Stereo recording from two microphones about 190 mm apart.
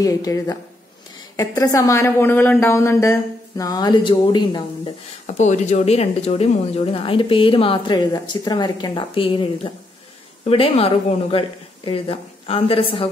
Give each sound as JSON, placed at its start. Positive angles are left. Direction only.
{"t": 0.0, "sound": "a woman's voice", "side_deg": 20}
{"t": 5.2, "sound": "speech", "side_deg": 40}